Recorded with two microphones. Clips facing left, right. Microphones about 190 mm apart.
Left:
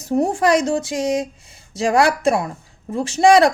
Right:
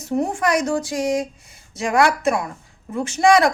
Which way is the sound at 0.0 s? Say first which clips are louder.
Left 3 dB; 35° left (ahead or behind).